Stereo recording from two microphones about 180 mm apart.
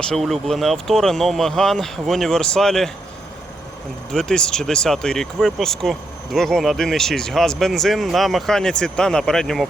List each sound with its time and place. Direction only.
0.1 s speech: centre (ahead or behind)
4.1 s speech: 5° left (ahead or behind)